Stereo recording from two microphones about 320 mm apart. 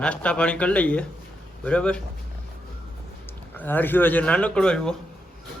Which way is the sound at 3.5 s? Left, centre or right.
Centre.